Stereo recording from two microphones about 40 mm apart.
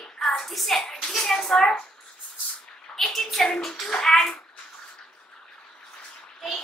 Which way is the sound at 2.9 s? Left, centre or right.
Centre.